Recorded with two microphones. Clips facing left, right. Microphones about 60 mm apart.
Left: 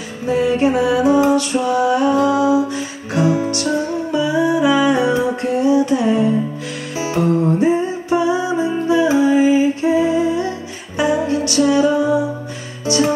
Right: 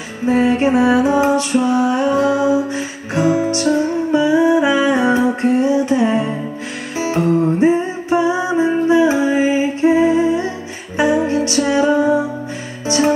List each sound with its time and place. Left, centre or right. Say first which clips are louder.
0.3 s music: right 1 dB; right
7.6 s music: right 2 dB; right